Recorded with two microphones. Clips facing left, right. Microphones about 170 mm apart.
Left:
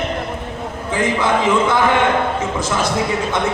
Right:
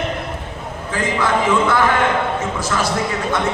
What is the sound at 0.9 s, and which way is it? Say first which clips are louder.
Speech: left 2 dB; 20° left (ahead or behind).